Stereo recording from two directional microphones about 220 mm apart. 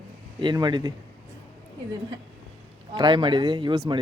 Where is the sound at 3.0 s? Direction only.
20° right (ahead or behind).